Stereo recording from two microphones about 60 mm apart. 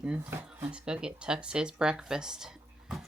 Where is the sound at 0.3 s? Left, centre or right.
Right.